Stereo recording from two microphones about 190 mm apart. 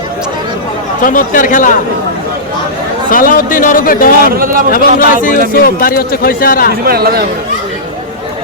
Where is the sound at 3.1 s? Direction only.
45° left (ahead or behind).